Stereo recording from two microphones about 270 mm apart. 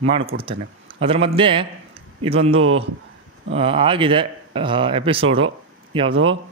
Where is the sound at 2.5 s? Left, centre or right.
Right.